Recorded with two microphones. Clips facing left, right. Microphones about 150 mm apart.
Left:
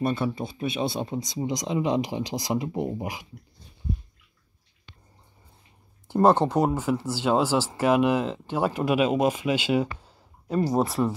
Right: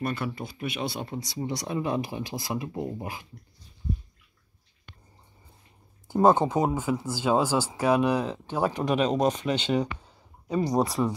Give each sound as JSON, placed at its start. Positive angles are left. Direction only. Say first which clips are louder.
{"t": 0.0, "sound": "speech", "louder": "left 5 dB", "side_deg": 20}
{"t": 6.0, "sound": "speech", "louder": "left 1 dB", "side_deg": 0}
{"t": 10.0, "sound": "a sound", "louder": "left 1 dB", "side_deg": 5}